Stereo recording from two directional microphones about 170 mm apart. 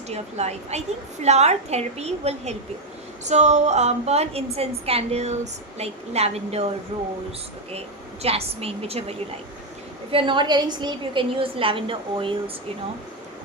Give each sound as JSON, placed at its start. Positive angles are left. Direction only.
{"t": 0.1, "sound": "a woman's voice", "side_deg": -40}
{"t": 7.7, "sound": "a woman's voice", "side_deg": -35}